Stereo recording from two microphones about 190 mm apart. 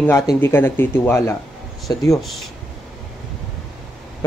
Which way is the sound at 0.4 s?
10° left (ahead or behind).